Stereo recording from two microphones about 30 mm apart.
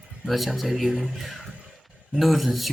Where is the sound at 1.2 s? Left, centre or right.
Centre.